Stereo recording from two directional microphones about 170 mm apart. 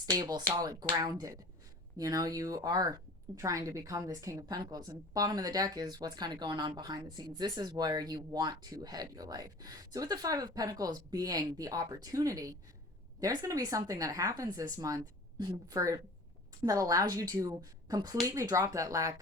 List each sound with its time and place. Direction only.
0.0 s speech: 25° right (ahead or behind)